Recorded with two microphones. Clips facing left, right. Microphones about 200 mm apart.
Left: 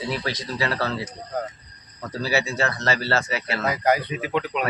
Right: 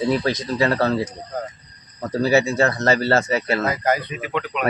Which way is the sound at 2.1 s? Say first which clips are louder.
Right 7 dB; 45° right (ahead or behind).